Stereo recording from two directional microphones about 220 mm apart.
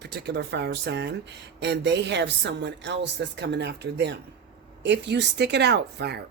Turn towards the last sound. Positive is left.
turn(degrees=-50)  # may be behind; listen again after turning